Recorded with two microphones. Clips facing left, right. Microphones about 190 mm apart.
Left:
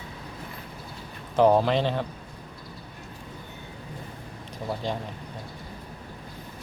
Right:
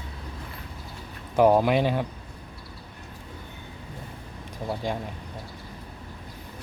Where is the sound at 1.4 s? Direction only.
10° right (ahead or behind).